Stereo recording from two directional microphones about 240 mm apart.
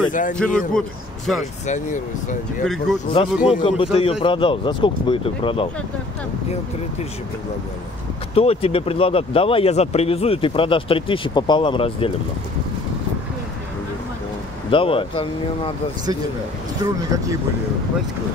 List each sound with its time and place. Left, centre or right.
0.1 s speech: left
0.4 s speech: centre
1.7 s speech: left
2.6 s speech: centre
3.1 s speech: left
8.4 s speech: left
14.7 s speech: left
16.8 s speech: centre